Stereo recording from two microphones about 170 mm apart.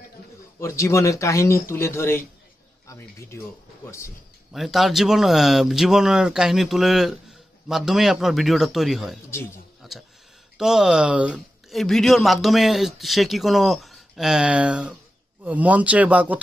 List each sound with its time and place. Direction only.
0.6 s speech: 15° left (ahead or behind)
4.5 s speech: centre (ahead or behind)
9.8 s a sound: centre (ahead or behind)
10.6 s speech: 5° right (ahead or behind)